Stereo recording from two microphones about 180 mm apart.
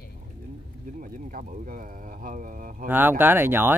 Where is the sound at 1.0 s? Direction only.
50° right (ahead or behind).